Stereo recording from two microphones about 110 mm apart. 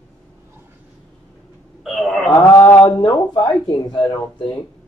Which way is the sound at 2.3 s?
30° left (ahead or behind).